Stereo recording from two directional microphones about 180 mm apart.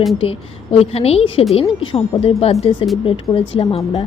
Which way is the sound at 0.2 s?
30° left (ahead or behind).